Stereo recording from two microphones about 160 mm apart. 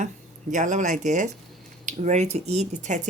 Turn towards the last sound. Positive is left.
turn(degrees=-50)  # may be behind; listen again after turning